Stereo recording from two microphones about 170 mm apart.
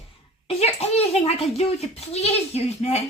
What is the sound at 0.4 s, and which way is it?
A child's voice, 35° left (ahead or behind).